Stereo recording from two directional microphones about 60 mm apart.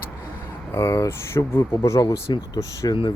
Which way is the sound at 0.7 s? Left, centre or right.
Left.